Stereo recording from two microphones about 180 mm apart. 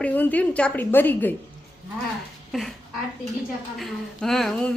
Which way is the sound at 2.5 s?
Centre (ahead or behind).